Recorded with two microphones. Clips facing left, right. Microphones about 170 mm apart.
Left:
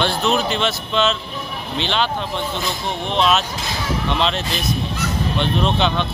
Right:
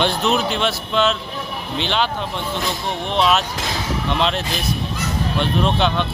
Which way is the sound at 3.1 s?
10° right (ahead or behind).